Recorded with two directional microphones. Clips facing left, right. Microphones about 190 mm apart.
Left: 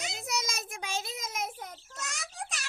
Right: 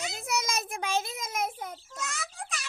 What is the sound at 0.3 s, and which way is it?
Child singing, 55° right (ahead or behind).